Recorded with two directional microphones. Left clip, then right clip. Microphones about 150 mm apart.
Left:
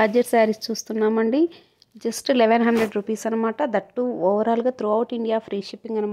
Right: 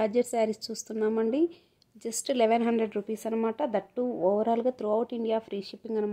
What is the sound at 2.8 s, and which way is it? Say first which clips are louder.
Speech: left 7 dB; 25° left (ahead or behind).